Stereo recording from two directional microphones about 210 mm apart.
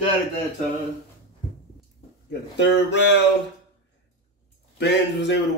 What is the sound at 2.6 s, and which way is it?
Speech, 55° left (ahead or behind).